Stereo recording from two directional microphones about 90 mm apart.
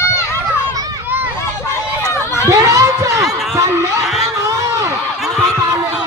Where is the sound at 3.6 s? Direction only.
30° right (ahead or behind).